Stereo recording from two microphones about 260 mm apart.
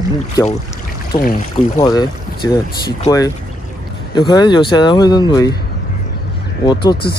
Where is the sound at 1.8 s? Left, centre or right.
Centre.